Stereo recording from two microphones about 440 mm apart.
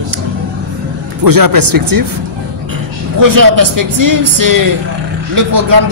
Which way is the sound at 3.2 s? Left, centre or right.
Right.